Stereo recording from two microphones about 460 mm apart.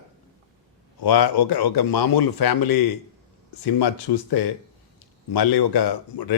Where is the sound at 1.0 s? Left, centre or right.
Left.